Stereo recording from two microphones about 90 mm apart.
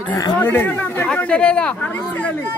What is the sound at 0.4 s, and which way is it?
Speech, 25° left (ahead or behind).